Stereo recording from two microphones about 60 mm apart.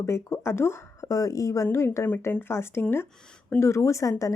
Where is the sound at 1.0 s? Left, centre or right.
Left.